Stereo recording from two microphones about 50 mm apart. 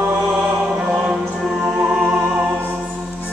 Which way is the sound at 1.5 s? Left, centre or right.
Centre.